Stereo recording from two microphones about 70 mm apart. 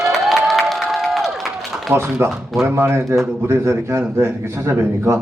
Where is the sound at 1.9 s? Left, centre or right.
Right.